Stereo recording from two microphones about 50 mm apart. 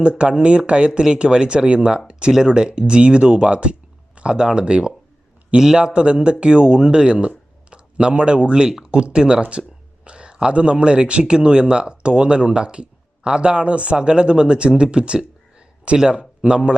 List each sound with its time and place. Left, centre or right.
0.0 s speech: right